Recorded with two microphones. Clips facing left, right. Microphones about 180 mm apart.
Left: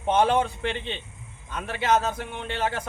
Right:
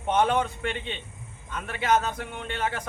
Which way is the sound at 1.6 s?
30° left (ahead or behind).